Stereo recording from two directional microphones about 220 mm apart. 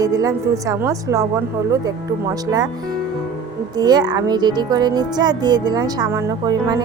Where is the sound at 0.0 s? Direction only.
15° right (ahead or behind).